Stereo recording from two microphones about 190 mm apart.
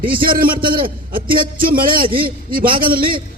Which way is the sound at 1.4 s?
50° right (ahead or behind).